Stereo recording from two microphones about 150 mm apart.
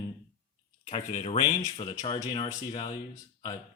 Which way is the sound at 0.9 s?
40° left (ahead or behind).